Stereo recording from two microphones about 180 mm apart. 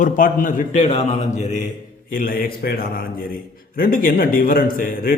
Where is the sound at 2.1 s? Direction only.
50° left (ahead or behind).